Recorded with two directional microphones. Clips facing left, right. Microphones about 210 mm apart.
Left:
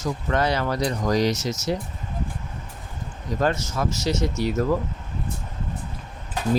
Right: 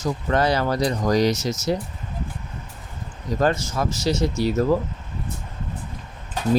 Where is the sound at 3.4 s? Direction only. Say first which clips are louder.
Right 2 dB; 35° right (ahead or behind).